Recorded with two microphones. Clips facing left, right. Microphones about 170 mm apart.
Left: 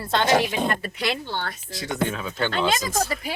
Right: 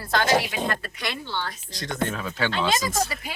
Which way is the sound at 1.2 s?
50° left (ahead or behind).